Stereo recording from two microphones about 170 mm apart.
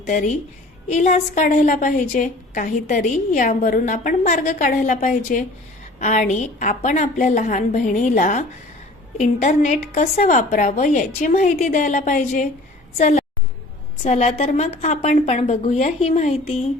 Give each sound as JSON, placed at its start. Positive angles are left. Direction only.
{"t": 0.1, "sound": "a woman's voice", "side_deg": 50}